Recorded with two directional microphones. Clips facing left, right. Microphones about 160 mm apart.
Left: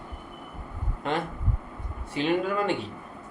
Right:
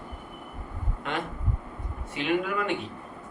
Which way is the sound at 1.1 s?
35° left (ahead or behind).